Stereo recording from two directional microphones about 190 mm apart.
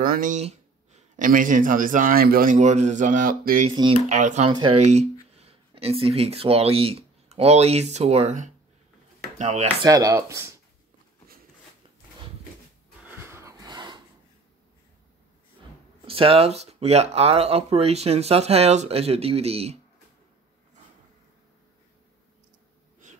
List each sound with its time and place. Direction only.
0.0 s speech: 45° right (ahead or behind)
3.7 s speech: 25° right (ahead or behind)
4.1 s speech: 40° right (ahead or behind)
4.5 s speech: 25° right (ahead or behind)
4.7 s speech: 35° right (ahead or behind)
9.8 s speech: 20° right (ahead or behind)
13.0 s a sound: 10° right (ahead or behind)
16.1 s speech: 30° right (ahead or behind)
23.0 s wheeze: 40° right (ahead or behind)